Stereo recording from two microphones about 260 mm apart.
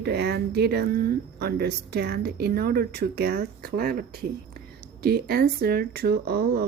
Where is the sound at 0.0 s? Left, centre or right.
Right.